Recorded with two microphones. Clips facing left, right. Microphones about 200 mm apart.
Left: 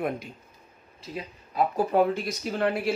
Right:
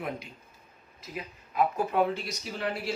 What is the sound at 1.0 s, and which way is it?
Speech, 30° left (ahead or behind).